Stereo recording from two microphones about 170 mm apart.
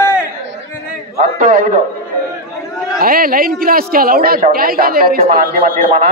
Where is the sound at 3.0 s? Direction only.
60° right (ahead or behind).